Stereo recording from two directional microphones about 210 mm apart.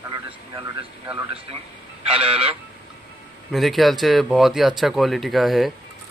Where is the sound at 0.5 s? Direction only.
20° right (ahead or behind).